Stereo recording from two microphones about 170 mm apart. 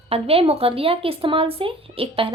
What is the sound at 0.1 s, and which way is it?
Speech, 35° right (ahead or behind).